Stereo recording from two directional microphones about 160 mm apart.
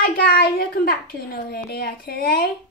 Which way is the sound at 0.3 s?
70° left (ahead or behind).